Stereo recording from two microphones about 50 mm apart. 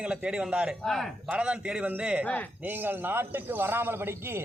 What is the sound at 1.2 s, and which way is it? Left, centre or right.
A man's voice, right.